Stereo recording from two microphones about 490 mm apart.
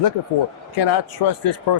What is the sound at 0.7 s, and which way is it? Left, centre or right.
Speech, left.